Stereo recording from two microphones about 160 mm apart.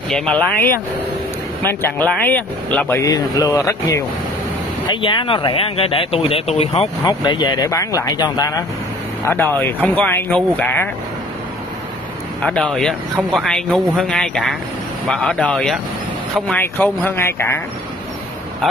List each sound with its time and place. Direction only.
0.1 s speech: 5° left (ahead or behind)
3.0 s speech: 25° left (ahead or behind)
4.8 s speech: 30° left (ahead or behind)
7.1 s speech: 30° left (ahead or behind)
9.2 s speech: 10° left (ahead or behind)
12.4 s speech: 5° left (ahead or behind)